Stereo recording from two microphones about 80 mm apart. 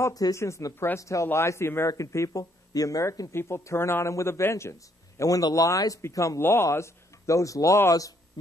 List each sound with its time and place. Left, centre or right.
0.1 s speech: left
0.4 s speech: left
1.9 s speech: left